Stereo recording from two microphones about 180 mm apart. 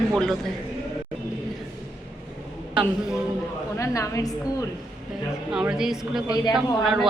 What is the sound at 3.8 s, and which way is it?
Speech, 15° left (ahead or behind).